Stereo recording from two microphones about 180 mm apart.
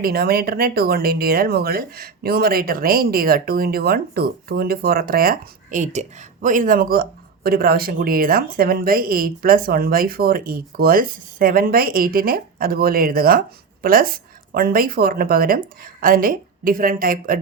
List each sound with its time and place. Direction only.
0.0 s speech: 60° right (ahead or behind)